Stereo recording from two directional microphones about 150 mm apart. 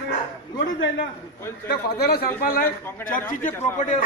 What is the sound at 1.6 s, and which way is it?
Speech, 90° left.